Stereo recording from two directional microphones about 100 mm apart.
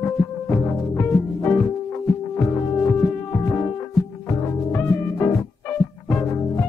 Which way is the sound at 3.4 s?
25° left (ahead or behind).